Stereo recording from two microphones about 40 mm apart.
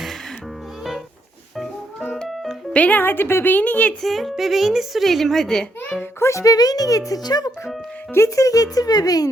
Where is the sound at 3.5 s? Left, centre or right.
Left.